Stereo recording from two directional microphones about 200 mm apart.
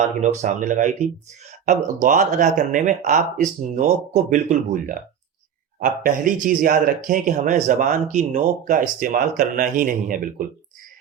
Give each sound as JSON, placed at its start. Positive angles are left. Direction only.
{"t": 0.0, "sound": "speech", "side_deg": -35}